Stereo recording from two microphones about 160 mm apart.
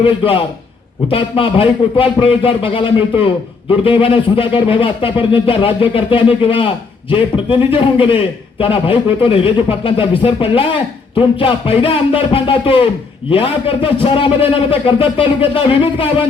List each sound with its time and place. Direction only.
0.0 s a man's voice: 35° left (ahead or behind)